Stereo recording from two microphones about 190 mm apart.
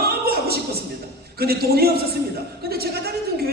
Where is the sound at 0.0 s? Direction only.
55° right (ahead or behind).